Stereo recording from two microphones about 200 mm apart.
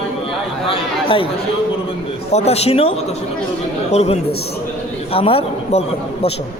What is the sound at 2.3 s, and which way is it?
Speech, 35° left (ahead or behind).